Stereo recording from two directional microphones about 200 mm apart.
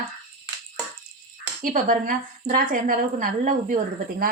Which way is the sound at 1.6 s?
40° right (ahead or behind).